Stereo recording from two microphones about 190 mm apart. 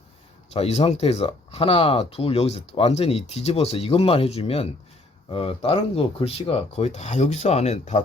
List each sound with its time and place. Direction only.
0.5 s speech: 30° left (ahead or behind)